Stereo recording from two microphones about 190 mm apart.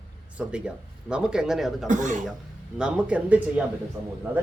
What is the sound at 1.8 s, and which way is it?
Speech, 40° right (ahead or behind).